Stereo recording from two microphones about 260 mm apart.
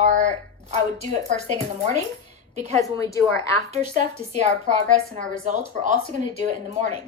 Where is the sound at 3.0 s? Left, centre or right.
Centre.